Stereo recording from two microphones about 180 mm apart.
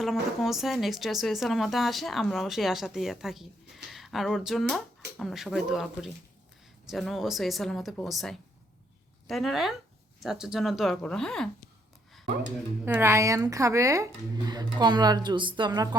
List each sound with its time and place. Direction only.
0.0 s speech: centre (ahead or behind)
12.8 s speech: 15° right (ahead or behind)